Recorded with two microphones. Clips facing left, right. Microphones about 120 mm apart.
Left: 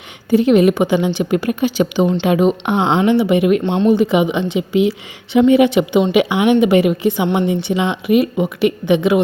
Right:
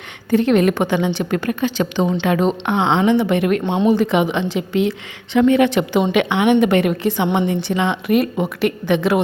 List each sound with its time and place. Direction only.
0.3 s a woman's voice: 5° left (ahead or behind)